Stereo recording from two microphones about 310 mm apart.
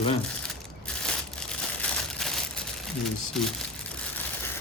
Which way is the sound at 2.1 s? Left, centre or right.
Centre.